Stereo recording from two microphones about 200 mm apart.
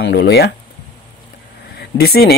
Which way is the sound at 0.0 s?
60° left (ahead or behind).